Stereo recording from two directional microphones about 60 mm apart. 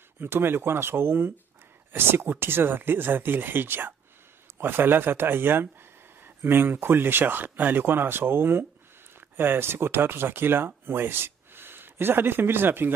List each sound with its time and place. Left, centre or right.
0.2 s speech: right